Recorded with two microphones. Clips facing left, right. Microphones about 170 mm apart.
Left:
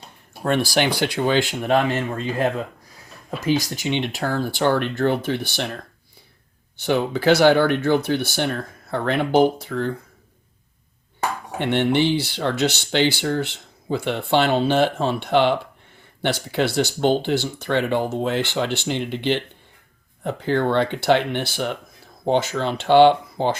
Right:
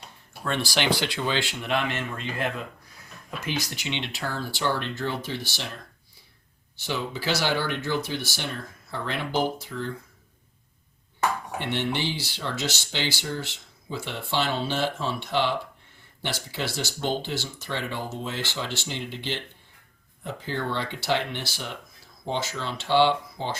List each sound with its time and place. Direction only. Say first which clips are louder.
1.1 s speech: left 8 dB; 50° left (ahead or behind)
6.8 s speech: left 11 dB; 60° left (ahead or behind)
11.6 s speech: left 10 dB; 60° left (ahead or behind)